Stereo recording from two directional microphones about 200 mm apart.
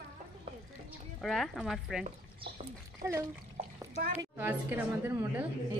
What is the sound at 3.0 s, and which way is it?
A woman's voice, 15° right (ahead or behind).